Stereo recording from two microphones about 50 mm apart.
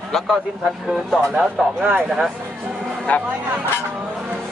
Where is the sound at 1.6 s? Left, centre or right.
Centre.